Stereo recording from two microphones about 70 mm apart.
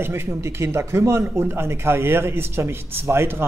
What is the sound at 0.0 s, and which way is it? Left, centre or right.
Speech, right.